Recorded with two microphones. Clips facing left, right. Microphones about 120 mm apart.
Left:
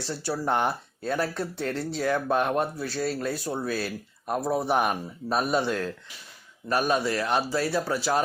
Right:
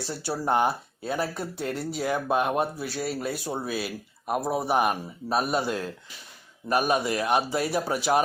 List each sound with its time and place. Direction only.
0.1 s speech: 10° right (ahead or behind)